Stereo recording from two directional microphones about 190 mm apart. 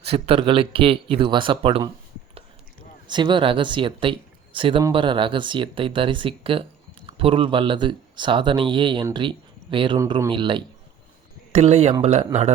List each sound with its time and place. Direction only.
0.1 s speech: 30° right (ahead or behind)
3.1 s speech: 25° right (ahead or behind)